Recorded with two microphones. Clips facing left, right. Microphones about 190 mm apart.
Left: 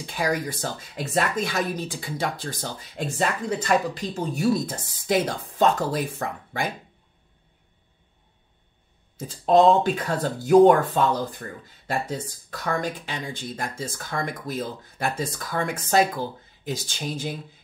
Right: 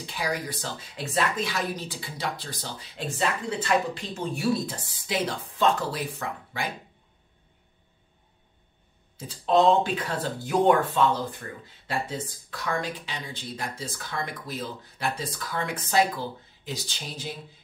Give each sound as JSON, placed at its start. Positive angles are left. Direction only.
{"t": 0.0, "sound": "speech", "side_deg": 45}
{"t": 9.1, "sound": "speech", "side_deg": 45}